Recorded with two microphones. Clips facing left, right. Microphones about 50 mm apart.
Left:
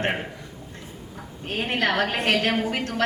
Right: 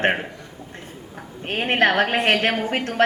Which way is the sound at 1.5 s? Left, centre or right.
Right.